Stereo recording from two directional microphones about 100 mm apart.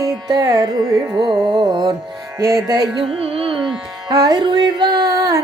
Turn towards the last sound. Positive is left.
turn(degrees=-40)  # may be behind; listen again after turning